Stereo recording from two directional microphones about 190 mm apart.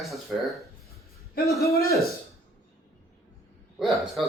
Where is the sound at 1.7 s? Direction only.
55° left (ahead or behind).